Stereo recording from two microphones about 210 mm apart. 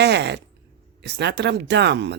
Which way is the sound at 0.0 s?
55° right (ahead or behind).